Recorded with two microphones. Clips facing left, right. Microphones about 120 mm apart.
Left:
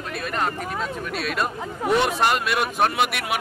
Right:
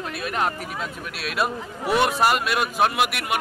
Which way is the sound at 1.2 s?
5° right (ahead or behind).